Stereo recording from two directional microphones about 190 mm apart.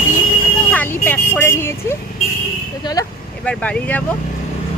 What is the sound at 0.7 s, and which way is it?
Speech, 10° left (ahead or behind).